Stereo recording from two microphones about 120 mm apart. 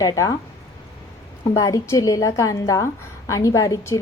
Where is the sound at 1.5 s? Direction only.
30° left (ahead or behind).